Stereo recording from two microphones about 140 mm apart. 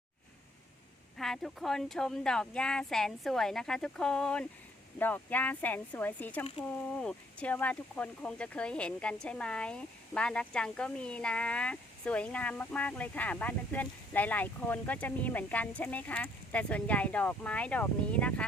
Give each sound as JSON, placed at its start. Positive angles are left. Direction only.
{"t": 1.2, "sound": "speech", "side_deg": 0}